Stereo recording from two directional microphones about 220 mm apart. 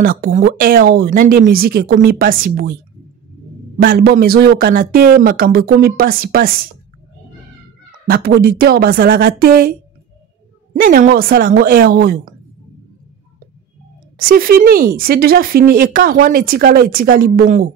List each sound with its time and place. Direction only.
0.0 s speech: 40° right (ahead or behind)
3.8 s speech: 40° right (ahead or behind)
8.1 s speech: 45° right (ahead or behind)
14.1 s a woman's voice: 40° right (ahead or behind)